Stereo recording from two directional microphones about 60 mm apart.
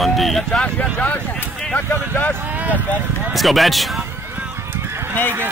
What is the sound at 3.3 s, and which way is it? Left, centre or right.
Speech, centre.